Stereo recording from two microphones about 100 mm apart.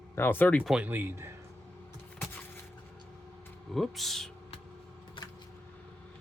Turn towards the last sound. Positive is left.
turn(degrees=0)  # may be behind; listen again after turning